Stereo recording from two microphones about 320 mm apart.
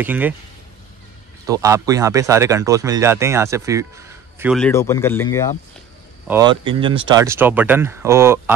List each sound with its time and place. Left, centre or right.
0.0 s speech: centre
1.4 s speech: centre
6.2 s speech: centre